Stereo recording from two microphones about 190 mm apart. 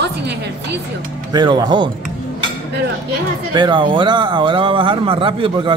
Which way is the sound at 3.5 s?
25° right (ahead or behind).